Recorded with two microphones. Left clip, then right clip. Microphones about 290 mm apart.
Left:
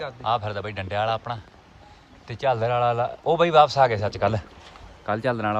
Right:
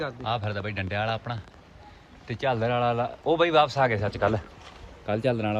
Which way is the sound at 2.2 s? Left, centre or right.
Centre.